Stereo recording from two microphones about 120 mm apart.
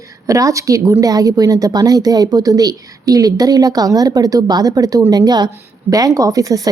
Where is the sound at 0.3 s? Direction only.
25° right (ahead or behind).